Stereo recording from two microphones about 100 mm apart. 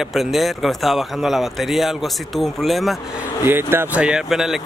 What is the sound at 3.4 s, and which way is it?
Speech, 20° right (ahead or behind).